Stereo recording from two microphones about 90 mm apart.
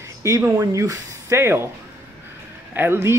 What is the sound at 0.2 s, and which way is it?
Speech, 30° right (ahead or behind).